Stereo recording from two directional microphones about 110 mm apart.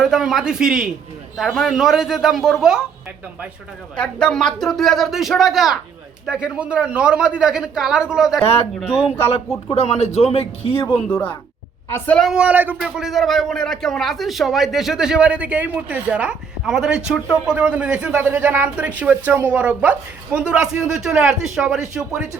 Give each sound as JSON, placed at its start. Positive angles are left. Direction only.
{"t": 0.0, "sound": "a man's voice", "side_deg": -5}
{"t": 3.9, "sound": "a man's voice", "side_deg": 10}
{"t": 9.0, "sound": "a man's voice", "side_deg": 60}
{"t": 11.1, "sound": "a woman's voice", "side_deg": 15}
{"t": 12.3, "sound": "speech", "side_deg": -10}
{"t": 12.8, "sound": "a man's voice", "side_deg": 0}